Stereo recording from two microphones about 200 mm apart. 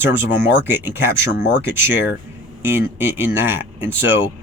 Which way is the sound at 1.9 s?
65° left (ahead or behind).